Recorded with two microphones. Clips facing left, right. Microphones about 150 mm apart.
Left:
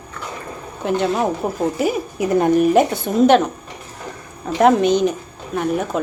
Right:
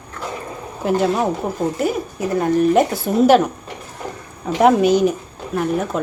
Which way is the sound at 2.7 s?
5° right (ahead or behind).